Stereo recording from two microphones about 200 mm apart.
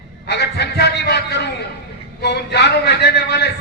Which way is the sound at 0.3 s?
55° left (ahead or behind).